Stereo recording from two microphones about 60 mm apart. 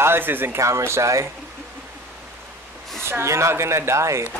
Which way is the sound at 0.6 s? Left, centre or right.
Right.